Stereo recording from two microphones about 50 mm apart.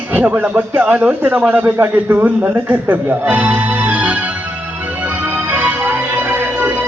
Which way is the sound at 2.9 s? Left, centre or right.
Right.